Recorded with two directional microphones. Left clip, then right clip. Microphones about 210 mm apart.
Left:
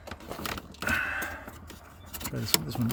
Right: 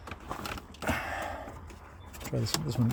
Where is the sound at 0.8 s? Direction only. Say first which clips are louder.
Left 4 dB; 25° right (ahead or behind).